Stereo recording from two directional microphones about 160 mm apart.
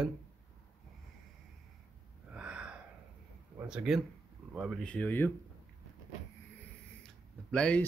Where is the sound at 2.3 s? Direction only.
5° right (ahead or behind).